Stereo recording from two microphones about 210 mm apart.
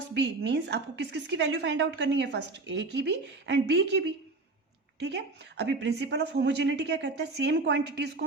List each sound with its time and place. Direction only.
0.1 s a woman's voice: 55° right (ahead or behind)